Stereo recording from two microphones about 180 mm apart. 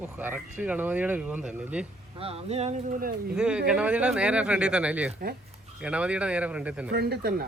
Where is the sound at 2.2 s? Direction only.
35° right (ahead or behind); by 3.3 s 55° right (ahead or behind).